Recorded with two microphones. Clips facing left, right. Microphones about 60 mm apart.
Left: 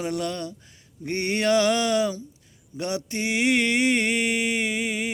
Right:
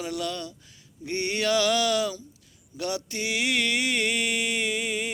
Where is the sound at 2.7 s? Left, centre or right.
Left.